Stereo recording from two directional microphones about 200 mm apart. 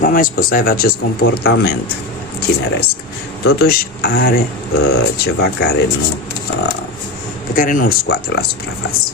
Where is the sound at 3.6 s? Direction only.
50° left (ahead or behind).